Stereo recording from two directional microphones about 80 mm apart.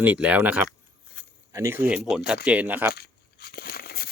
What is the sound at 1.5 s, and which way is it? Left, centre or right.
Speech, right.